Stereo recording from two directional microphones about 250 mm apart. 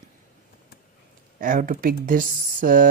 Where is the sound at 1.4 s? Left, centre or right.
Right.